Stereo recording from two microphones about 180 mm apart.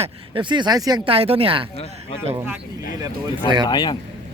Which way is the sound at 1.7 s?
35° left (ahead or behind).